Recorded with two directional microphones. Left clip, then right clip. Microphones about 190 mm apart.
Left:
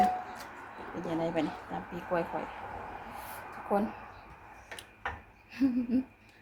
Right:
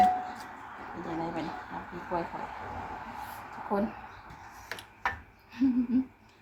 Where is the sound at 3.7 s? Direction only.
25° left (ahead or behind).